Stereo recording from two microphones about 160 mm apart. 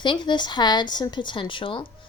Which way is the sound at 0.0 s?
30° left (ahead or behind).